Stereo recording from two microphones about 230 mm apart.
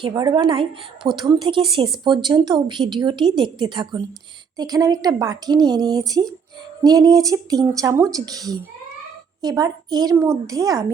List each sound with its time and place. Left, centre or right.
0.0 s a woman's voice: centre